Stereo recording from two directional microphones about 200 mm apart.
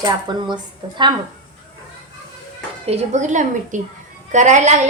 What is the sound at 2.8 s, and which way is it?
A woman's voice, 35° right (ahead or behind).